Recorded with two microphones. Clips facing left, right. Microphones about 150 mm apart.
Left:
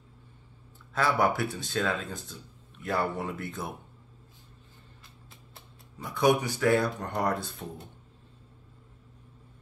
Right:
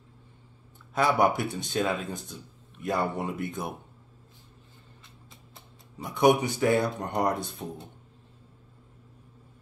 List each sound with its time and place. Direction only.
0.9 s speech: 20° right (ahead or behind)
5.9 s speech: 20° right (ahead or behind)